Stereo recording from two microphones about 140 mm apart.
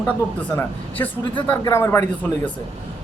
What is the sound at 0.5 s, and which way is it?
A man's voice, 10° left (ahead or behind).